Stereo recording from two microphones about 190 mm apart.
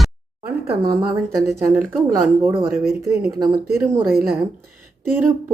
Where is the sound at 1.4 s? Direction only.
15° right (ahead or behind).